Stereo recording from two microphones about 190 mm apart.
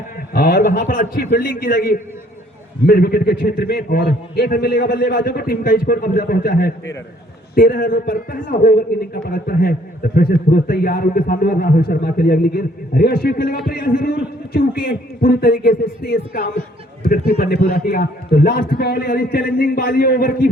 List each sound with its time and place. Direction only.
0.3 s a man's voice: 50° left (ahead or behind)